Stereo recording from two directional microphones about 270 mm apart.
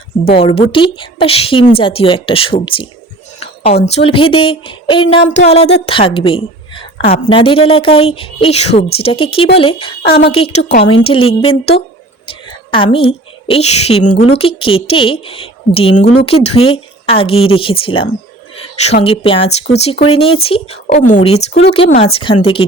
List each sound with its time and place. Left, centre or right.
0.3 s a woman's voice: left
10.1 s speech: left
10.3 s a woman's voice: left
10.6 s speech: left
10.8 s a woman's voice: centre